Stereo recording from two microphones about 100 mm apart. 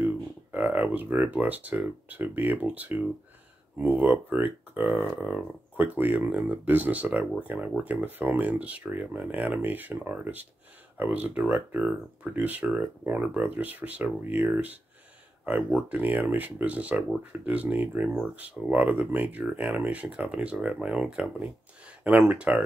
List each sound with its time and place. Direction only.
0.0 s speech: 15° right (ahead or behind)